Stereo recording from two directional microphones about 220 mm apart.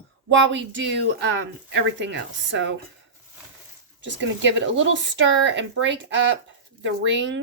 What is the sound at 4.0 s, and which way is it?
Speech, 55° right (ahead or behind).